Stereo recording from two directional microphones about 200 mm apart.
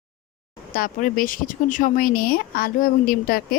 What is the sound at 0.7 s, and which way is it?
Speech, 45° left (ahead or behind).